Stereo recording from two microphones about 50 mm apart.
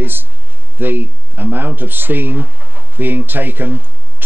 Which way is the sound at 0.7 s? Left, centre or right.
Right.